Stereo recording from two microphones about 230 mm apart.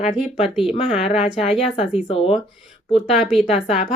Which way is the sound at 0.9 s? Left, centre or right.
Left.